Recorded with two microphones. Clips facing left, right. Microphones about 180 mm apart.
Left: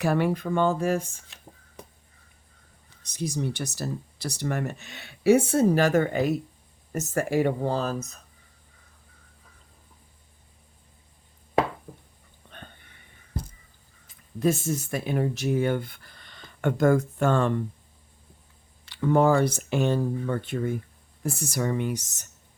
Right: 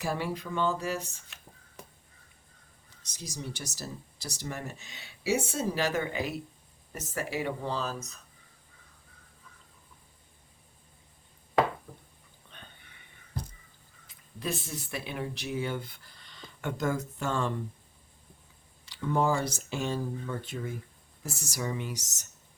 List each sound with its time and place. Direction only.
0.0 s speech: 60° left (ahead or behind)
3.0 s speech: 60° left (ahead or behind)
12.5 s a sound: 50° left (ahead or behind)
14.3 s speech: 45° left (ahead or behind)
18.9 s speech: 55° left (ahead or behind)